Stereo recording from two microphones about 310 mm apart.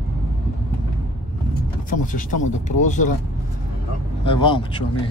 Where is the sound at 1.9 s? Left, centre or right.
Left.